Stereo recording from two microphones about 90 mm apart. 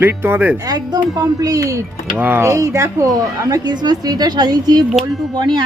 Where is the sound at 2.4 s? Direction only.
35° right (ahead or behind); by 5.7 s 55° right (ahead or behind).